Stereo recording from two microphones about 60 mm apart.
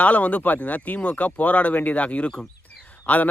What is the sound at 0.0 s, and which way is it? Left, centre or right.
Speech, left.